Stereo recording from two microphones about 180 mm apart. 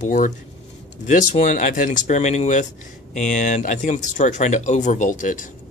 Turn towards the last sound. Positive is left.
turn(degrees=45)  # may be behind; listen again after turning